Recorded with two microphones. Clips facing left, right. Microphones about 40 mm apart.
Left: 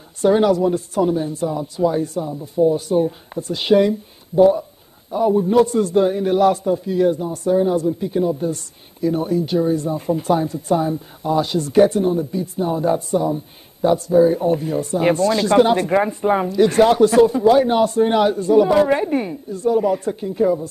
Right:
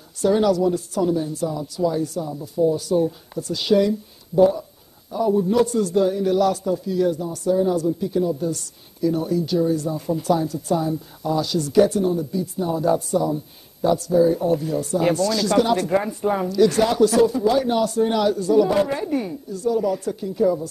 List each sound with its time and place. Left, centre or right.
0.2 s a man's voice: left
4.4 s a man's voice: left